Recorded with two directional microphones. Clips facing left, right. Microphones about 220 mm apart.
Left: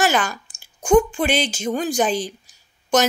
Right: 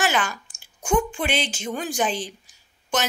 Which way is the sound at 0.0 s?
40° left (ahead or behind).